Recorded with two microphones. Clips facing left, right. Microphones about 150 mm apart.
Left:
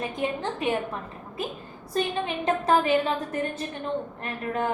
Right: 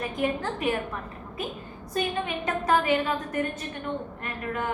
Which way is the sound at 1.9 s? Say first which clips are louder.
Left 1 dB; 30° left (ahead or behind).